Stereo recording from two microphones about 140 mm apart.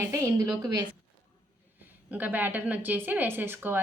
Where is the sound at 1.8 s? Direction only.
10° right (ahead or behind).